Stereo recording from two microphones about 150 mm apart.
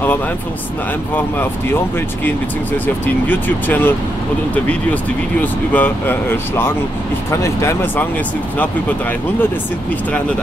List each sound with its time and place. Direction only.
3.3 s speech: 10° left (ahead or behind)
5.4 s speech: 10° left (ahead or behind)